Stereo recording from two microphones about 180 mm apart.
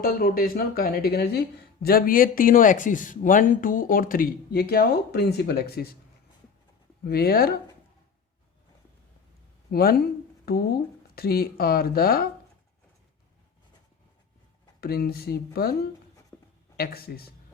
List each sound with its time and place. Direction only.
0.0 s speech: 55° left (ahead or behind)
7.0 s speech: 60° left (ahead or behind)
9.7 s speech: 60° left (ahead or behind)
14.8 s speech: 60° left (ahead or behind)
16.3 s writing: 15° left (ahead or behind)
16.7 s speech: 60° left (ahead or behind)